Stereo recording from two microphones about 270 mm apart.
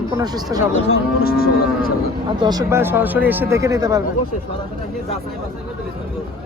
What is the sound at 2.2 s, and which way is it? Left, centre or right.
Speech, centre.